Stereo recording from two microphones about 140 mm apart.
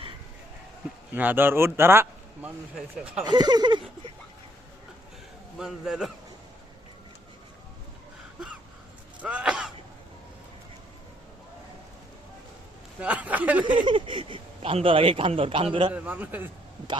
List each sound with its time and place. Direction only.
1.1 s speech: 15° right (ahead or behind)
2.7 s speech: 5° right (ahead or behind)
3.2 s speech: 30° right (ahead or behind)
5.5 s speech: 5° right (ahead or behind)
9.2 s a sound: 5° right (ahead or behind)
13.0 s speech: 10° right (ahead or behind)
13.7 s speech: 35° right (ahead or behind)
15.9 s speech: 10° right (ahead or behind)